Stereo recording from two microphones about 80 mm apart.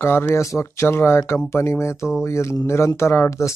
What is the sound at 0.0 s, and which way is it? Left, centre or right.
Speech, left.